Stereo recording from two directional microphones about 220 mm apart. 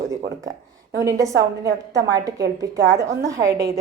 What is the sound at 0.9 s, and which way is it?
A woman's voice, 15° right (ahead or behind).